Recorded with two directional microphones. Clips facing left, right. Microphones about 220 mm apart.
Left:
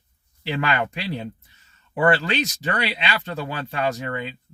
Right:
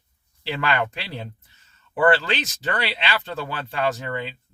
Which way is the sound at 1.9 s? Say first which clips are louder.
Even; 10° left (ahead or behind).